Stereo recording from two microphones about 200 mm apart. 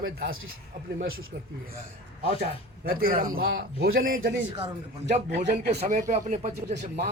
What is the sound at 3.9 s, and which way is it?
Speech, 45° right (ahead or behind).